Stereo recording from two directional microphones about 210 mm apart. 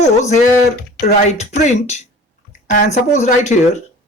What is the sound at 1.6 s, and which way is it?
Speech, 35° left (ahead or behind).